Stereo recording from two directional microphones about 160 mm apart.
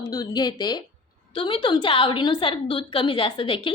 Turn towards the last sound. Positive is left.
turn(degrees=30)  # may be behind; listen again after turning